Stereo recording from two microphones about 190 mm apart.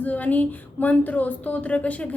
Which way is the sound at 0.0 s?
10° left (ahead or behind).